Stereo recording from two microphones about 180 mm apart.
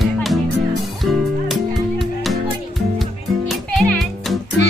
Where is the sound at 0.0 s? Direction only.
Centre (ahead or behind).